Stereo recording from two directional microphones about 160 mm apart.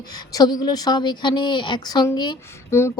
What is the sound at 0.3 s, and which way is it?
Speech, 25° left (ahead or behind).